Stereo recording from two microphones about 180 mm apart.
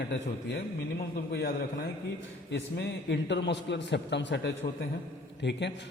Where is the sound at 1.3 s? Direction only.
65° left (ahead or behind).